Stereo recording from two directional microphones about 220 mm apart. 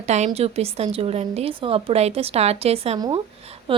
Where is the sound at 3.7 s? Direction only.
25° right (ahead or behind).